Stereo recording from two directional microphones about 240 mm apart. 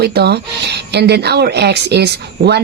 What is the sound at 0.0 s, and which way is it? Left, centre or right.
Speech, right.